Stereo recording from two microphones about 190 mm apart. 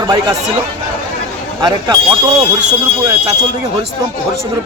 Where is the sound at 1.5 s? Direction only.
20° right (ahead or behind).